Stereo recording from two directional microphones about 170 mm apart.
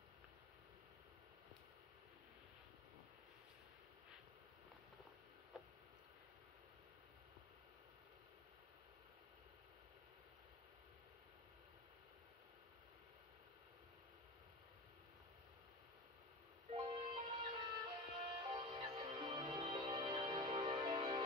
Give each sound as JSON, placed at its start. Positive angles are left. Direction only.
{"t": 16.7, "sound": "music", "side_deg": -30}